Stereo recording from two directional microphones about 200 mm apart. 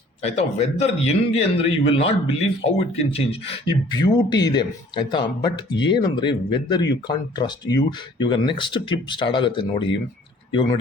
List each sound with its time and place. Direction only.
0.2 s a man's voice: 30° left (ahead or behind)